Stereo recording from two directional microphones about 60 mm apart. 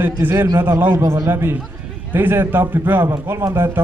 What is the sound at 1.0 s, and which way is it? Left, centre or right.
A man's voice, right.